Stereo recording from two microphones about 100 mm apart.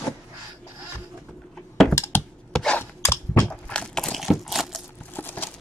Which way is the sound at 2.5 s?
5° left (ahead or behind).